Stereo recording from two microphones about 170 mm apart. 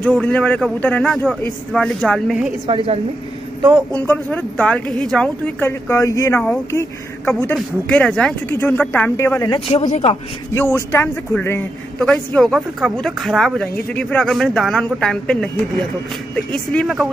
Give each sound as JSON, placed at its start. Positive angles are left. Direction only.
{"t": 0.0, "sound": "a woman's voice", "side_deg": 5}
{"t": 2.6, "sound": "a woman's voice", "side_deg": -30}
{"t": 3.9, "sound": "a woman's voice", "side_deg": 10}
{"t": 9.5, "sound": "speech", "side_deg": 35}
{"t": 10.5, "sound": "a woman's voice", "side_deg": 15}